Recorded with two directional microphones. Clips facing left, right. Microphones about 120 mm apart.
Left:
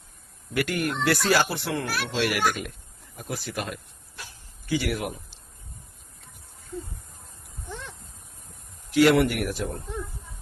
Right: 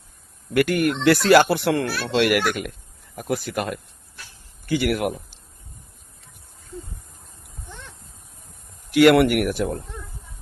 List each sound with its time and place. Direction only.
0.5 s speech: 60° right (ahead or behind)
8.9 s speech: 65° right (ahead or behind)